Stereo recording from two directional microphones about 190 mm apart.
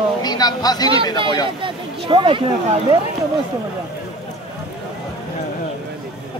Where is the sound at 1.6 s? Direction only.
25° right (ahead or behind).